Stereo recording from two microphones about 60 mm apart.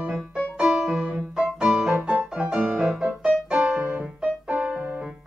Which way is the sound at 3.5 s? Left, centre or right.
Right.